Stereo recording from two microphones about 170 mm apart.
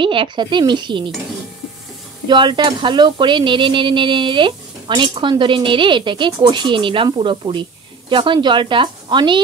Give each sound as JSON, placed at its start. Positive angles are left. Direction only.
{"t": 0.0, "sound": "speech", "side_deg": -30}
{"t": 2.2, "sound": "speech", "side_deg": -25}